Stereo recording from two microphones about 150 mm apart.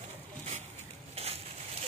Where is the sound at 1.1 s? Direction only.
45° right (ahead or behind).